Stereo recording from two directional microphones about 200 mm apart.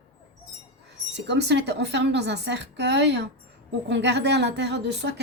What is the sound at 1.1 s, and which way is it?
A woman's voice, 60° right (ahead or behind).